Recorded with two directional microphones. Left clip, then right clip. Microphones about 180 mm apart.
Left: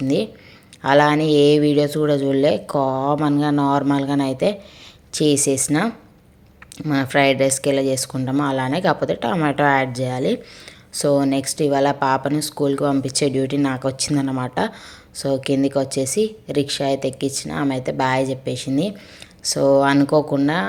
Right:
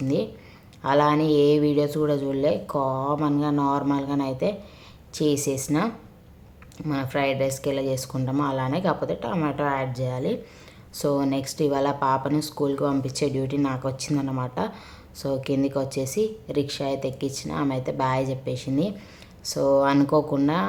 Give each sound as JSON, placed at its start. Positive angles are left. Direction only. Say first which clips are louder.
{"t": 0.8, "sound": "speech", "louder": "left 5 dB", "side_deg": 15}